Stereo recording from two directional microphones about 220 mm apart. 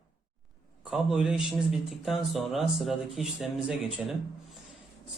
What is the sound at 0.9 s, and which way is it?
Speech, 5° right (ahead or behind).